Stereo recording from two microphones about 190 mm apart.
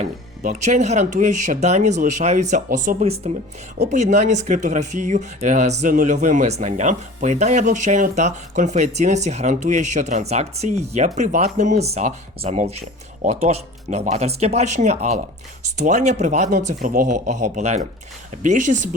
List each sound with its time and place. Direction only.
0.0 s speech: 40° right (ahead or behind)